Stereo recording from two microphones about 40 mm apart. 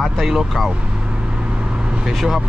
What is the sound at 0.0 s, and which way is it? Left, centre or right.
Speech, centre.